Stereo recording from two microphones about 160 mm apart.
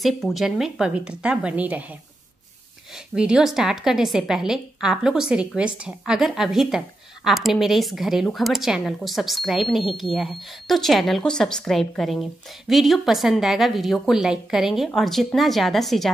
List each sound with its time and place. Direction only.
0.0 s speech: centre (ahead or behind)